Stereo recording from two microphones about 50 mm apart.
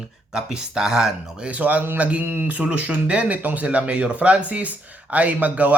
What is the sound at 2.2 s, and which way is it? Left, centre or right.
Speech, right.